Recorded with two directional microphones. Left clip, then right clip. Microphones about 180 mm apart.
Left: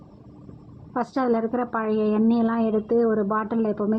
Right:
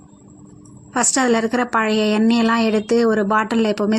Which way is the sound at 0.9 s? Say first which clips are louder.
Right 6 dB; 15° right (ahead or behind).